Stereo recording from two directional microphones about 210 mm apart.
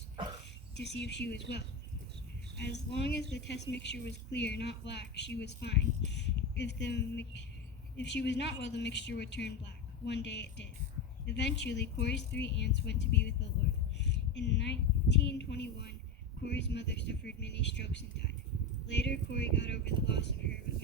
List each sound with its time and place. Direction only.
0.8 s speech: 55° left (ahead or behind)
2.9 s a woman's voice: 55° left (ahead or behind)